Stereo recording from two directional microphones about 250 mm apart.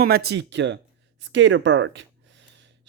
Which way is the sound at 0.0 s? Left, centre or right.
Right.